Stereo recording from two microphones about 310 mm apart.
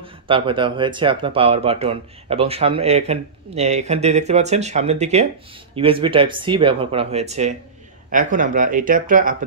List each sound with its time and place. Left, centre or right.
0.0 s speech: centre